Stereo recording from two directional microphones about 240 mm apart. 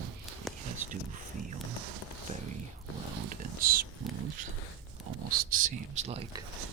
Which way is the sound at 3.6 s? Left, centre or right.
Right.